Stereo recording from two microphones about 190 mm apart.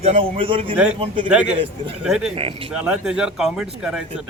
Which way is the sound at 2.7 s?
5° right (ahead or behind).